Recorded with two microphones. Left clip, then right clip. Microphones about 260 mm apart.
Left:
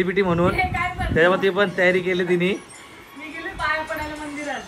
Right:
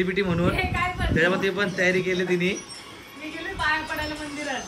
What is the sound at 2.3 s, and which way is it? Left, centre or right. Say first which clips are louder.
Speech: left 3 dB; left.